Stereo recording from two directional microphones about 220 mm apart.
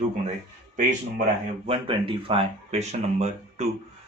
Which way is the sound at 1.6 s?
25° right (ahead or behind).